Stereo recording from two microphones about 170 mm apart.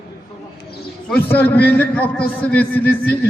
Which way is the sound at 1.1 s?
10° left (ahead or behind).